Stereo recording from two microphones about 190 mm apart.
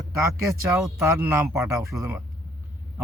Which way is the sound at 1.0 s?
10° right (ahead or behind).